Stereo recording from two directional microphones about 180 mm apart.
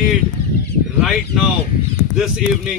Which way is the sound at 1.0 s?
Centre (ahead or behind).